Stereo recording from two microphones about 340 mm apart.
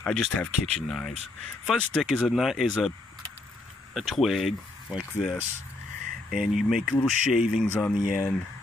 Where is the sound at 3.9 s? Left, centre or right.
Centre.